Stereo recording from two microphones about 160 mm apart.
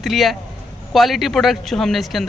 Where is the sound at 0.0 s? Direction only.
Centre (ahead or behind).